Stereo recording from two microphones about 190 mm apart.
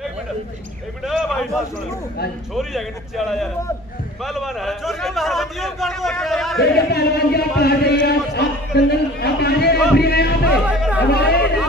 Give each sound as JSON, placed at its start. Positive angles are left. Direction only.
{"t": 1.0, "sound": "a man's voice", "side_deg": 0}
{"t": 4.2, "sound": "a man's voice", "side_deg": 0}
{"t": 6.6, "sound": "chant", "side_deg": 55}
{"t": 10.5, "sound": "chatter", "side_deg": -5}
{"t": 11.1, "sound": "chant", "side_deg": 60}